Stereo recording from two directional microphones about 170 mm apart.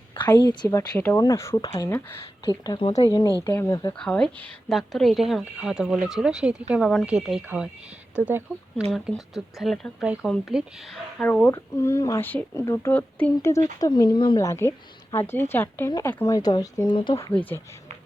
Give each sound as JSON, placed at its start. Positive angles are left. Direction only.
{"t": 0.3, "sound": "speech", "side_deg": 25}
{"t": 3.4, "sound": "speech", "side_deg": 15}
{"t": 3.9, "sound": "speech", "side_deg": 5}
{"t": 8.9, "sound": "speech", "side_deg": 0}
{"t": 14.4, "sound": "speech", "side_deg": 15}
{"t": 17.3, "sound": "speech", "side_deg": 10}